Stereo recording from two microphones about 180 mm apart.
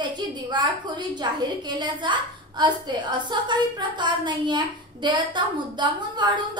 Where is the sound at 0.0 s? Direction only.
25° right (ahead or behind).